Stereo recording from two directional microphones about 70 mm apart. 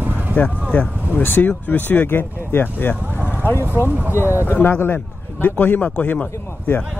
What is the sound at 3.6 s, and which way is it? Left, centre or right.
Speech, right.